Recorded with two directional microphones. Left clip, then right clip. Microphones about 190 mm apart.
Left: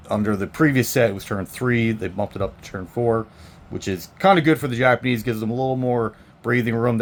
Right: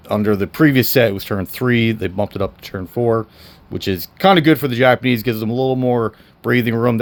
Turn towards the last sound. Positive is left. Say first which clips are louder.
# right 4 dB
turn(degrees=-45)  # may be behind; listen again after turning